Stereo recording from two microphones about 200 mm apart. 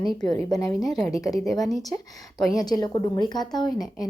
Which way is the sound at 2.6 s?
20° left (ahead or behind).